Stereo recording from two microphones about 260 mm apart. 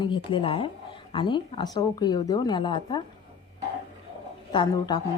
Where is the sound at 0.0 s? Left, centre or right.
Centre.